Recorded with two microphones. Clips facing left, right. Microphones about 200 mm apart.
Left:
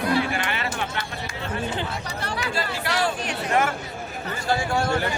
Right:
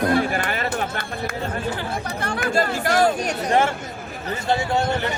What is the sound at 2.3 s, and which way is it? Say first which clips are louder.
Chatter: right 7 dB; 50° right (ahead or behind).